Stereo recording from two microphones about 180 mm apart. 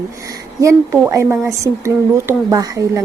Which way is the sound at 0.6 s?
15° right (ahead or behind).